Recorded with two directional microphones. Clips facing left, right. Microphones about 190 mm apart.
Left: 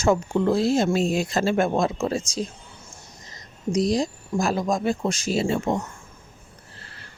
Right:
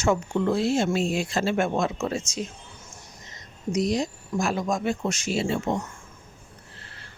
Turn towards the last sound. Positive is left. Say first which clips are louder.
# left 2 dB
turn(degrees=45)  # may be behind; listen again after turning